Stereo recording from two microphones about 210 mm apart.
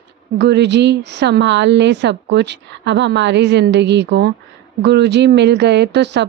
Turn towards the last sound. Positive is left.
turn(degrees=-55)  # may be behind; listen again after turning